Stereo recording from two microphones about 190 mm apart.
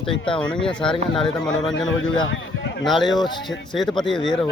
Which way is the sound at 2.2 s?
90° left.